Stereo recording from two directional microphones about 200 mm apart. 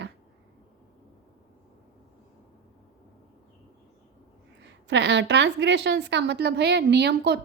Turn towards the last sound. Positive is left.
turn(degrees=-55)  # may be behind; listen again after turning